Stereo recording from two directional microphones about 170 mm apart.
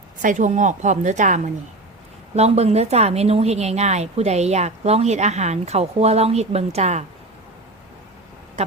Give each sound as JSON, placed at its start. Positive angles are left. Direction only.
{"t": 0.2, "sound": "a woman's voice", "side_deg": -45}